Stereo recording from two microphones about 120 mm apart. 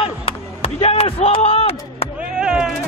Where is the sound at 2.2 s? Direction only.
5° right (ahead or behind).